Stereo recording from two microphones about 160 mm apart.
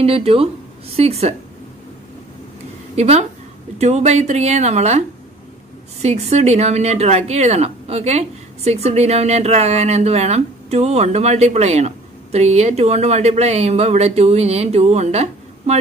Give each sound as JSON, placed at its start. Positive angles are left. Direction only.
{"t": 0.0, "sound": "speech", "side_deg": -35}
{"t": 3.0, "sound": "speech", "side_deg": -45}
{"t": 6.0, "sound": "speech", "side_deg": -45}